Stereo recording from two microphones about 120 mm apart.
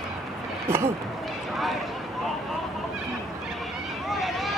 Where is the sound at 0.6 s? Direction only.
20° right (ahead or behind).